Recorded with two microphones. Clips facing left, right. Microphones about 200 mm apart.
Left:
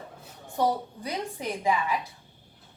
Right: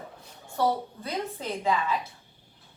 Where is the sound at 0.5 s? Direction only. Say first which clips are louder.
Even; 15° left (ahead or behind).